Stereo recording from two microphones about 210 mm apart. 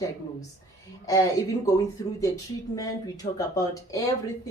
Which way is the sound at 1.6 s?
15° left (ahead or behind).